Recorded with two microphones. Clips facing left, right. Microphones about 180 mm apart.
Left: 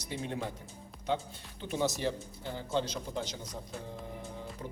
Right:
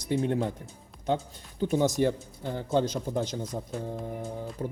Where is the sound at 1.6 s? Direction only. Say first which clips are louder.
Right 8 dB; 45° right (ahead or behind).